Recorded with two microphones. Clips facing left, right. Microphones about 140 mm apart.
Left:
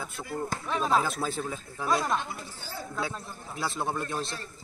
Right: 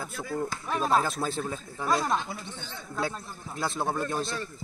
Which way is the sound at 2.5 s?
5° left (ahead or behind).